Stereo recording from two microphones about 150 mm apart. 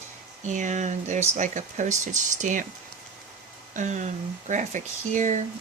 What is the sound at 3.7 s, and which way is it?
Speech, 55° right (ahead or behind).